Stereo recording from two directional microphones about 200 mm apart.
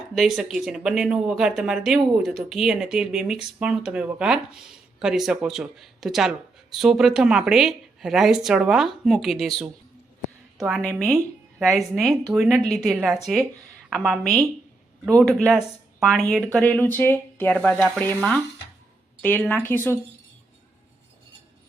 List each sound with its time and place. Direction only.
0.1 s speech: centre (ahead or behind)
10.7 s speech: centre (ahead or behind)
19.2 s speech: 10° left (ahead or behind)